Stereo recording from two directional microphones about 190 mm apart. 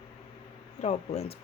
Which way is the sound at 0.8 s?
35° left (ahead or behind).